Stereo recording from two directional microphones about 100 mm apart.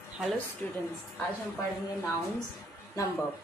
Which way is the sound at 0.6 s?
20° left (ahead or behind).